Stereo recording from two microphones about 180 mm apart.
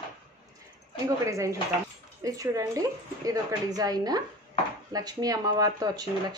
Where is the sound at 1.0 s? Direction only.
15° right (ahead or behind).